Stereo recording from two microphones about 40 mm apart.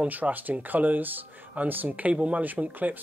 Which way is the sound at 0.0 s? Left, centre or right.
Right.